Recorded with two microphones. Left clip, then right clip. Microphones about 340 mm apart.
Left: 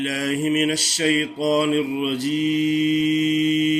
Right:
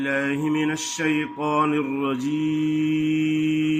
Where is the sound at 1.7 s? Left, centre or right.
Right.